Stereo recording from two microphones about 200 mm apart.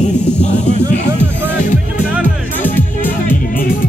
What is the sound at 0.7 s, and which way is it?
Speech, 35° left (ahead or behind).